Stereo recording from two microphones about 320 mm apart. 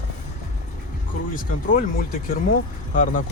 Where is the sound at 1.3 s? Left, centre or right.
Left.